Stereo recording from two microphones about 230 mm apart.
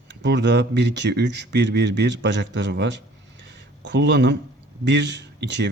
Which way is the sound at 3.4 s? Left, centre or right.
Right.